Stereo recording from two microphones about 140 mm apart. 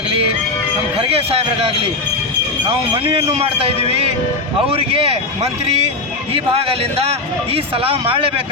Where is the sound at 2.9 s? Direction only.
40° right (ahead or behind).